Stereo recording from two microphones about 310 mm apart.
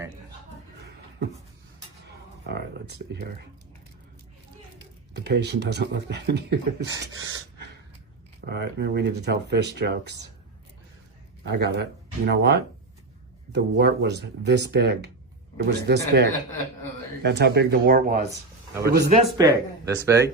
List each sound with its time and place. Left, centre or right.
2.5 s a sound: right
5.1 s speech: right
6.8 s speech: centre
8.4 s speech: right
11.4 s speech: right
19.4 s speech: centre